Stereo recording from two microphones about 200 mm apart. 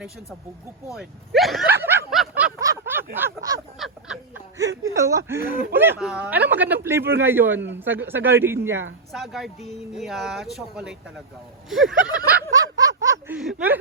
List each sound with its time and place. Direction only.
0.9 s speech: centre (ahead or behind)
1.8 s snicker: 10° right (ahead or behind)
3.8 s speech: centre (ahead or behind)
4.6 s speech: 70° right (ahead or behind)
4.9 s speech: 15° right (ahead or behind)
9.1 s speech: centre (ahead or behind)
13.0 s a sound: 15° right (ahead or behind)
13.3 s speech: 5° right (ahead or behind)